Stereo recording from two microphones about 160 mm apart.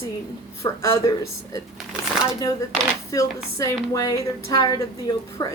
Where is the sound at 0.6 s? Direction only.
20° left (ahead or behind).